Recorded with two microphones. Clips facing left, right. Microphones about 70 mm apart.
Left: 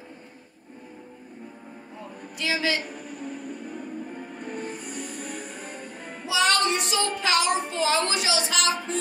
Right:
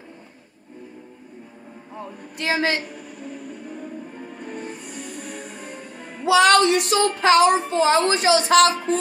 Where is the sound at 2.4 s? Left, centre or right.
Right.